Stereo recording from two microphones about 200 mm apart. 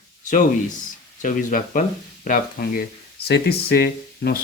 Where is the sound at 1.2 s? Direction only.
40° left (ahead or behind).